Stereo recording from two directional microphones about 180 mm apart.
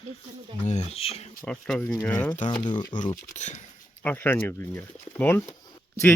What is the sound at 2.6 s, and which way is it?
Speech, 25° left (ahead or behind).